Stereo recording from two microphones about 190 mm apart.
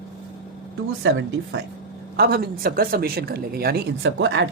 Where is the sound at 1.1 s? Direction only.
70° right (ahead or behind).